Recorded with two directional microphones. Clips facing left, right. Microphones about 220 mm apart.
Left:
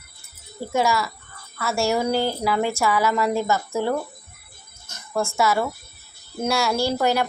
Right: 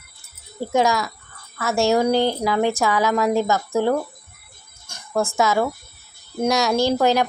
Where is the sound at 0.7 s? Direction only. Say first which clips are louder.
Right 2 dB; 15° right (ahead or behind).